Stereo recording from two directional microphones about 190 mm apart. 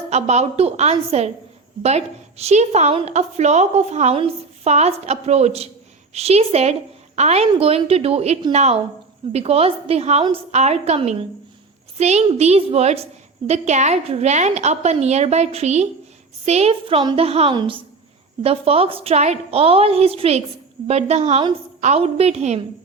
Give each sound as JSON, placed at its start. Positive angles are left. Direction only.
{"t": 0.1, "sound": "a woman's voice", "side_deg": -35}